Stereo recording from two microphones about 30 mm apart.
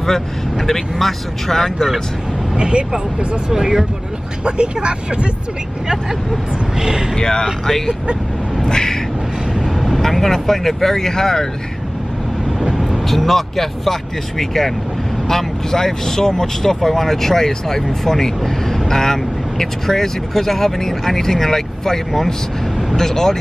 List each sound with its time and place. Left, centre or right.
0.0 s speech: centre
2.5 s speech: right
3.5 s speech: centre
4.8 s speech: right
6.8 s speech: centre
7.2 s speech: left
7.6 s speech: centre
8.6 s vehicle: centre
9.5 s vehicle: centre
10.0 s speech: centre
12.7 s vehicle: centre
13.0 s speech: centre
16.8 s speech: centre